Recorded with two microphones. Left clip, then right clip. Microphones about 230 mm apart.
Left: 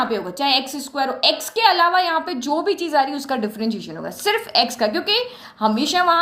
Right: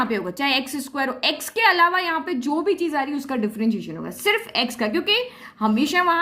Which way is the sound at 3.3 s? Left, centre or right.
Right.